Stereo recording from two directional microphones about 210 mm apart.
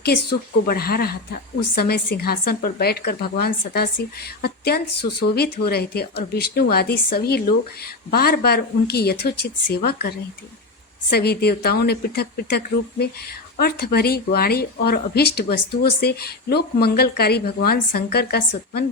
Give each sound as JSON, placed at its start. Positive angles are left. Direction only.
{"t": 0.0, "sound": "speech", "side_deg": 50}